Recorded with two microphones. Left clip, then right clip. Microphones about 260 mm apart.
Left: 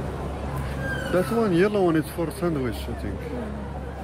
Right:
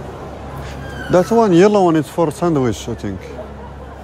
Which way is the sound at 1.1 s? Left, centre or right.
Centre.